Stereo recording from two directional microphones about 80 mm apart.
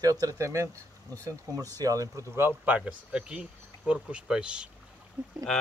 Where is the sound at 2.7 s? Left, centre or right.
Centre.